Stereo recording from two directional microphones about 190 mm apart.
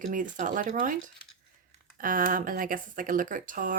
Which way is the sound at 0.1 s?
45° right (ahead or behind).